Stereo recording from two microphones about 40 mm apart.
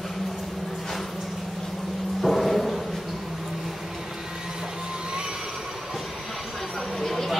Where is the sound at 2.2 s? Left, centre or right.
Centre.